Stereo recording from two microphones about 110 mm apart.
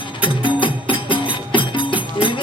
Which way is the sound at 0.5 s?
50° left (ahead or behind).